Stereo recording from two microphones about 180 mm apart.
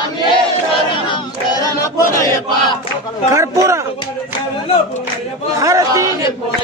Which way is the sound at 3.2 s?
15° right (ahead or behind).